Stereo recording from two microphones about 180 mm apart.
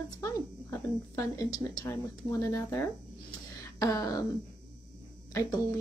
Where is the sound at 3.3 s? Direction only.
20° left (ahead or behind).